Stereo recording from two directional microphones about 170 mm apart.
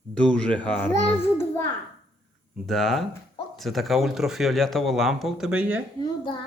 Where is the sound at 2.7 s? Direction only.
Centre (ahead or behind).